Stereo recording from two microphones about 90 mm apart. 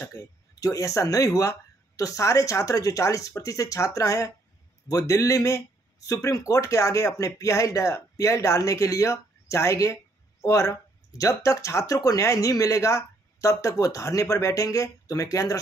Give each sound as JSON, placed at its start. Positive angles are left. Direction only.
{"t": 0.0, "sound": "speech", "side_deg": 40}